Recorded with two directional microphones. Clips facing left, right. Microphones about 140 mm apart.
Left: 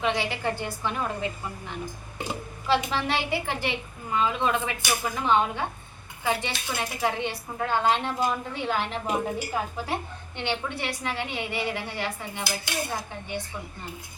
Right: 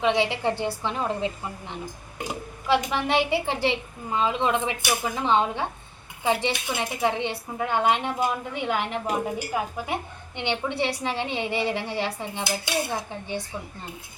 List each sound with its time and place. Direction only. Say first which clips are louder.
0.0 s a woman's voice: right 4 dB; 25° right (ahead or behind)